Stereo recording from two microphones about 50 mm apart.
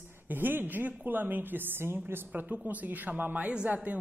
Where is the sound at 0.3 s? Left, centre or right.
Right.